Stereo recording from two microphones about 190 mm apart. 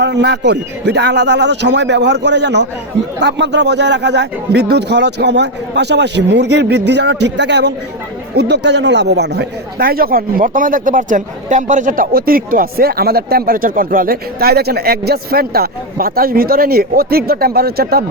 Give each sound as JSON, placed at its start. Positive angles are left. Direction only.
{"t": 0.0, "sound": "speech", "side_deg": -65}